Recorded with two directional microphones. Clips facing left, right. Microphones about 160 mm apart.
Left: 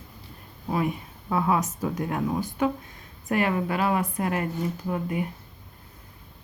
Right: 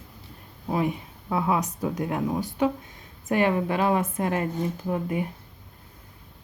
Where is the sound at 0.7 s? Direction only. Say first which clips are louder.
Right 1 dB; 25° right (ahead or behind).